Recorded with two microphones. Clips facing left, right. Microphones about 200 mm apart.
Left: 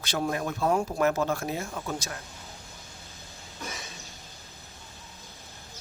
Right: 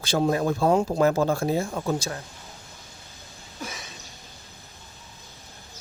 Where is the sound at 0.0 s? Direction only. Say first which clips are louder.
Right 7 dB; 30° right (ahead or behind).